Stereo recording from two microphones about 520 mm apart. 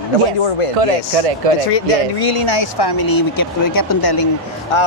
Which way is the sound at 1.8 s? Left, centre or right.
Left.